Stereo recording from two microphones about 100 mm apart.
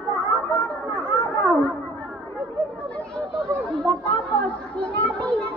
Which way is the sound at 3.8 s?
10° left (ahead or behind).